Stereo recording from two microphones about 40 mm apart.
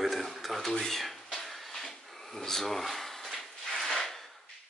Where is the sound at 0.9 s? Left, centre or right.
Centre.